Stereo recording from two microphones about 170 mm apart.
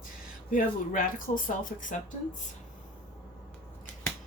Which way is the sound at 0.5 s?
55° left (ahead or behind).